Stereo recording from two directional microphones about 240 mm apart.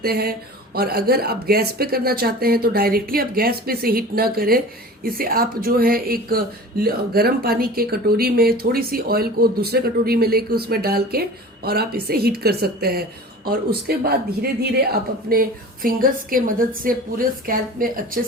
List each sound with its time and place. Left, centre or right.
0.0 s speech: right